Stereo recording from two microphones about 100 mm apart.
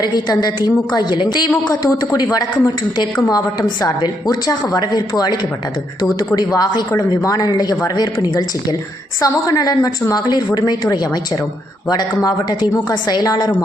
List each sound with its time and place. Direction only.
0.0 s a woman's voice: 40° left (ahead or behind)
1.5 s a woman's voice: 35° left (ahead or behind)
9.2 s a woman's voice: 40° left (ahead or behind)